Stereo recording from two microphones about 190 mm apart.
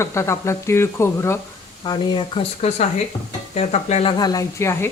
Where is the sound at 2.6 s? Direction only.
35° left (ahead or behind).